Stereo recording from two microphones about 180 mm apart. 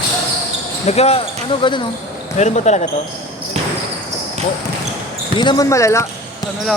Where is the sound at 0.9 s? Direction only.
35° left (ahead or behind).